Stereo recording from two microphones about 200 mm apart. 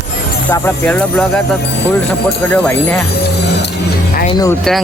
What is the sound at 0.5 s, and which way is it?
Speech, 10° left (ahead or behind).